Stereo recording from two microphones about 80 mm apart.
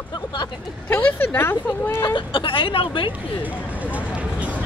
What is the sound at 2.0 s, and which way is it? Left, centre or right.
Speech, left.